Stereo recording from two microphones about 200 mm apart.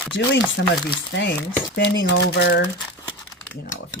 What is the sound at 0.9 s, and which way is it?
Speech, 60° left (ahead or behind).